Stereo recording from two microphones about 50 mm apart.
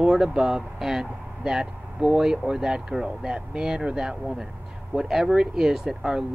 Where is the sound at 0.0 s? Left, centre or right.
Centre.